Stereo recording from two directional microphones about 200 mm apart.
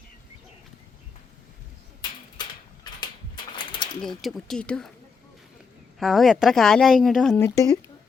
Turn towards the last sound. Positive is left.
turn(degrees=15)  # may be behind; listen again after turning